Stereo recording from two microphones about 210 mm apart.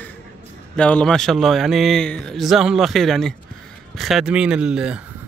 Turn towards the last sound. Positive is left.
turn(degrees=-5)  # may be behind; listen again after turning